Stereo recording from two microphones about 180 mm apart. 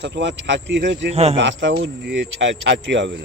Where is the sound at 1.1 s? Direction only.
35° right (ahead or behind).